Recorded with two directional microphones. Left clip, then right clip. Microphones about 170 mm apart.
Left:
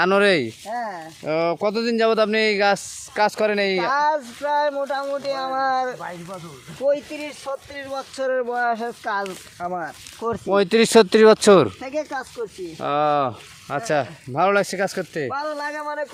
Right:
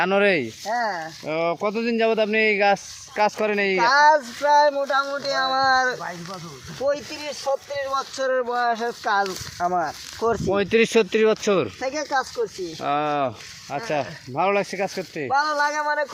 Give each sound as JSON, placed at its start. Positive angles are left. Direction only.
{"t": 0.0, "sound": "speech", "side_deg": 40}
{"t": 0.7, "sound": "speech", "side_deg": -25}
{"t": 1.2, "sound": "speech", "side_deg": 40}
{"t": 3.8, "sound": "speech", "side_deg": -35}
{"t": 4.9, "sound": "speech", "side_deg": -15}
{"t": 6.0, "sound": "speech", "side_deg": 0}
{"t": 7.7, "sound": "speech", "side_deg": 0}
{"t": 9.6, "sound": "speech", "side_deg": -10}
{"t": 10.5, "sound": "speech", "side_deg": 30}
{"t": 11.8, "sound": "speech", "side_deg": -15}
{"t": 12.8, "sound": "speech", "side_deg": 30}
{"t": 15.3, "sound": "speech", "side_deg": -10}